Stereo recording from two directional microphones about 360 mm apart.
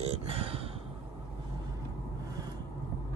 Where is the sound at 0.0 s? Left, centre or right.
Centre.